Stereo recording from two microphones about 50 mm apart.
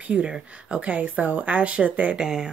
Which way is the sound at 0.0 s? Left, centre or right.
Right.